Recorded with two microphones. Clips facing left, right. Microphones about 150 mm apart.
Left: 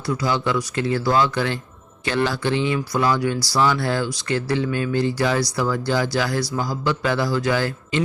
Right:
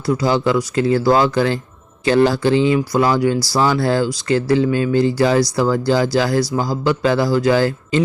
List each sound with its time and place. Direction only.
0.1 s speech: 35° right (ahead or behind)
2.7 s speech: 25° right (ahead or behind)
3.3 s speech: 40° right (ahead or behind)